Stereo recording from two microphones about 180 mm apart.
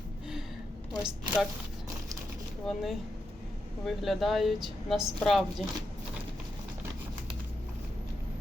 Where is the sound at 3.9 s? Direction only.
Centre (ahead or behind).